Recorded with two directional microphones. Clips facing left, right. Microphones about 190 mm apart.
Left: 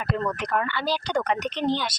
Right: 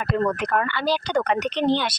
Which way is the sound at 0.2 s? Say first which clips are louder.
Right 4 dB; 55° right (ahead or behind).